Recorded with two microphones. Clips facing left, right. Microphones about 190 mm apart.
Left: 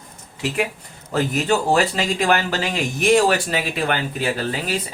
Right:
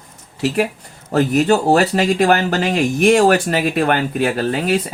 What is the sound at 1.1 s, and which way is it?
Speech, 45° right (ahead or behind).